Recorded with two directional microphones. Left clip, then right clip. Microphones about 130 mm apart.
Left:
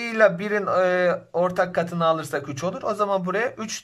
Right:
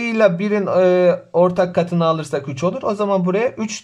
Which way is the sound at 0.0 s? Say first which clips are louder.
Right 3 dB; 20° right (ahead or behind).